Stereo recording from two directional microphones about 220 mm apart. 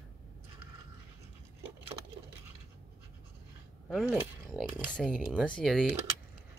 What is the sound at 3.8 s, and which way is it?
Speech, centre (ahead or behind).